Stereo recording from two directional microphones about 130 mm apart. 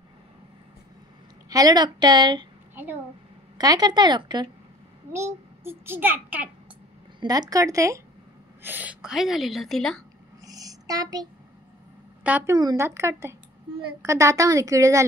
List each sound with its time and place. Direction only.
1.5 s a woman's voice: 30° right (ahead or behind)
2.7 s a child's voice: 15° right (ahead or behind)
3.5 s a woman's voice: 30° right (ahead or behind)
5.1 s a child's voice: 20° right (ahead or behind)
7.2 s a woman's voice: 30° right (ahead or behind)
8.6 s a woman's voice: 10° right (ahead or behind); by 10.0 s 5° left (ahead or behind)
10.4 s a sound: 30° right (ahead or behind)
12.2 s a woman's voice: 10° right (ahead or behind)
12.5 s a woman's voice: 30° right (ahead or behind)
12.8 s a woman's voice: 20° right (ahead or behind)